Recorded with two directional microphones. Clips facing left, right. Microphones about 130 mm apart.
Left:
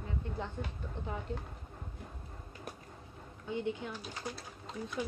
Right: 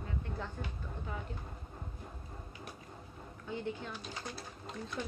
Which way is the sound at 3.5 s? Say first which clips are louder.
Left 3 dB; 20° left (ahead or behind).